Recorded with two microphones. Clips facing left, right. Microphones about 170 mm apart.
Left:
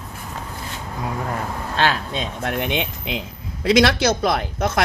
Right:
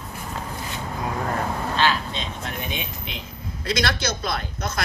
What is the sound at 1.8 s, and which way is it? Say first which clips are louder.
A man's voice: left 4 dB; 55° left (ahead or behind).